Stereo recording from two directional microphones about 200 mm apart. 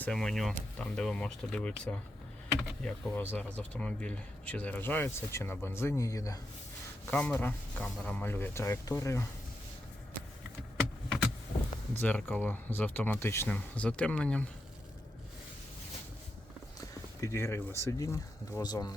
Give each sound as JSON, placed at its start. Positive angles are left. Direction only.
{"t": 0.0, "sound": "speech", "side_deg": 5}
{"t": 11.9, "sound": "speech", "side_deg": 10}
{"t": 17.2, "sound": "speech", "side_deg": 15}